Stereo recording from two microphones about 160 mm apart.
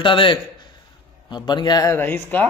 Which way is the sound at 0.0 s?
30° left (ahead or behind).